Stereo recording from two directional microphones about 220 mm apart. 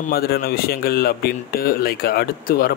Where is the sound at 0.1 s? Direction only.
45° left (ahead or behind).